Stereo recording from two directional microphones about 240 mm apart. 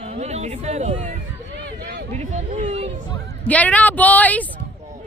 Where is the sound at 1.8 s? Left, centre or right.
Right.